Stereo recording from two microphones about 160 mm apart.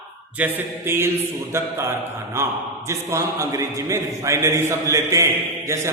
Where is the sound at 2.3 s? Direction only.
15° right (ahead or behind).